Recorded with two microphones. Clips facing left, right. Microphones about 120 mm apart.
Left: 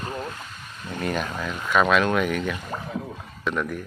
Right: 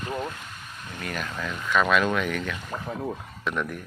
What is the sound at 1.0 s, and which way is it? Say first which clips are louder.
Speech: left 6 dB; 25° left (ahead or behind).